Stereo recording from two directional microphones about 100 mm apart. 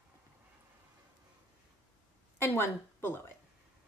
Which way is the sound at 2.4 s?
25° left (ahead or behind).